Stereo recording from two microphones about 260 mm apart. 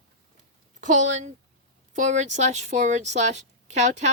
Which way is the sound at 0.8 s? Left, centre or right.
Right.